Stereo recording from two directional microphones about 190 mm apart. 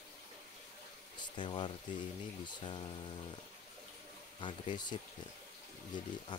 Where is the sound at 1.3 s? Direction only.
25° left (ahead or behind).